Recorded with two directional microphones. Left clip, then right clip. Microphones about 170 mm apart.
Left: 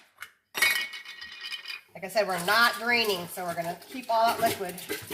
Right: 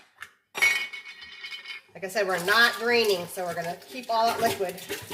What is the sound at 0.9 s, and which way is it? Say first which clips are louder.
Chink: even; 50° left (ahead or behind).